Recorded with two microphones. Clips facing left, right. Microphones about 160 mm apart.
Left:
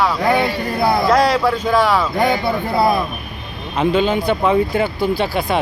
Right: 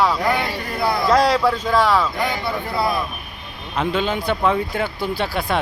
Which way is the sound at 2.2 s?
35° left (ahead or behind).